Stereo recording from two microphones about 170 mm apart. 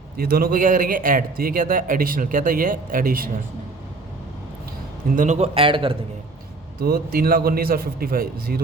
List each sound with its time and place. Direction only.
0.2 s a man's voice: 60° right (ahead or behind)
5.1 s a man's voice: 45° right (ahead or behind)
6.7 s a man's voice: 60° right (ahead or behind)